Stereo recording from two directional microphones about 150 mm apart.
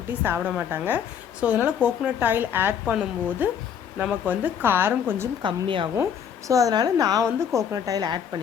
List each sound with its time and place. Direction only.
0.3 s speech: 10° right (ahead or behind)
5.4 s a woman's voice: 35° right (ahead or behind)
6.5 s a woman's voice: 25° right (ahead or behind)